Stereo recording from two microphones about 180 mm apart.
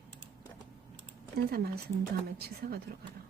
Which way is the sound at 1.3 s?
60° right (ahead or behind).